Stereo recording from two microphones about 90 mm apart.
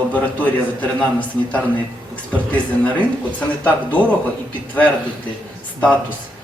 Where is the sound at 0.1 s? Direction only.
15° left (ahead or behind).